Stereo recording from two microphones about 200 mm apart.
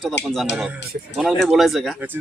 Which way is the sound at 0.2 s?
60° left (ahead or behind).